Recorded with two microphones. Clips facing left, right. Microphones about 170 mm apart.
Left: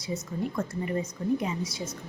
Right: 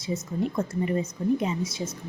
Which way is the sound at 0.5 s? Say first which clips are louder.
Right 3 dB; 25° right (ahead or behind).